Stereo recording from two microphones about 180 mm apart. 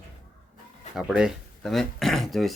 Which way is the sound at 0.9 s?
5° right (ahead or behind).